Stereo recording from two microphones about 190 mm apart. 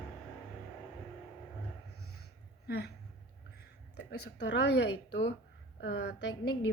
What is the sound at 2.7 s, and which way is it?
Speech, 60° left (ahead or behind).